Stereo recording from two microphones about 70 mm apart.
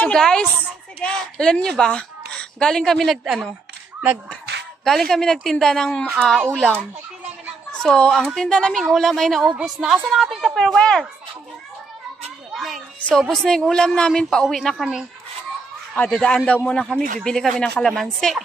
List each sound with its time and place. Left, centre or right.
0.0 s a woman's voice: centre
4.8 s a woman's voice: centre
12.5 s a woman's voice: centre
16.1 s a woman's voice: centre